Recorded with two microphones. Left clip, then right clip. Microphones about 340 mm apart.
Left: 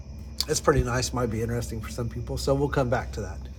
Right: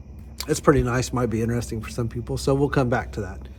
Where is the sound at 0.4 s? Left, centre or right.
Right.